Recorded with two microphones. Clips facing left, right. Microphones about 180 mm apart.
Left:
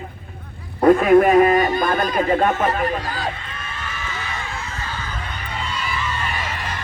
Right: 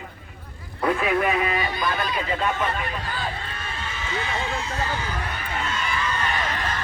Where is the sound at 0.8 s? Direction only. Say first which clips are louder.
Left 10 dB; 45° left (ahead or behind).